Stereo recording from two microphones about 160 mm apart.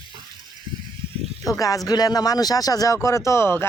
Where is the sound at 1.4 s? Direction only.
20° left (ahead or behind).